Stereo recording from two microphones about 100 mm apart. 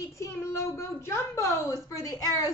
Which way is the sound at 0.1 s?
30° left (ahead or behind).